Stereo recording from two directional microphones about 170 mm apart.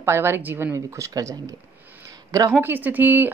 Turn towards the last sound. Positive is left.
turn(degrees=-10)  # may be behind; listen again after turning